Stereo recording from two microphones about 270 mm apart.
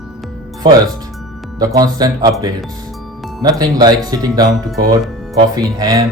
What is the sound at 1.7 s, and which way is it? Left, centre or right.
Speech, centre.